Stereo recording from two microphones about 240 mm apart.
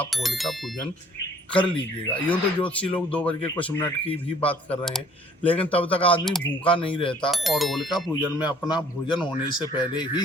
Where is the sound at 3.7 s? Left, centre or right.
Left.